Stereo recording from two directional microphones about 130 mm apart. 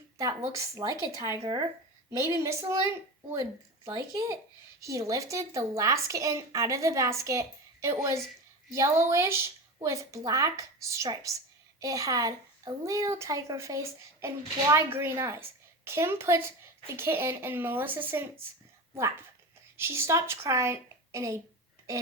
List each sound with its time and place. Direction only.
0.2 s a woman's voice: 25° right (ahead or behind)
19.7 s a woman's voice: 20° right (ahead or behind)